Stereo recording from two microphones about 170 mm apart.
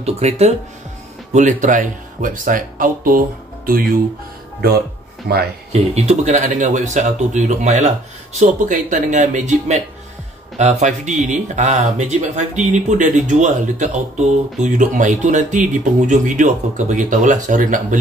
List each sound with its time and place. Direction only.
0.0 s speech: 40° right (ahead or behind); by 3.8 s 55° right (ahead or behind)
4.6 s speech: 70° right (ahead or behind)
5.7 s speech: 40° right (ahead or behind)